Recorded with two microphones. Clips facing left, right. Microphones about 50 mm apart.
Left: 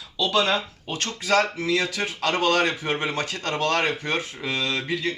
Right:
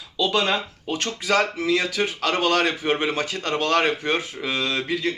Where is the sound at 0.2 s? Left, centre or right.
Right.